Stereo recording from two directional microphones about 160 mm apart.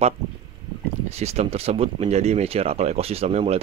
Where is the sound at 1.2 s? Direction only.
40° right (ahead or behind).